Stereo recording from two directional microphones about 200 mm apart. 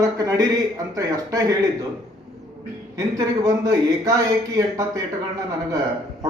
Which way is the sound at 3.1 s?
15° right (ahead or behind).